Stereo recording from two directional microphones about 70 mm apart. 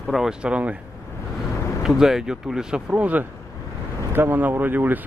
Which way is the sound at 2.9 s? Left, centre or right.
Right.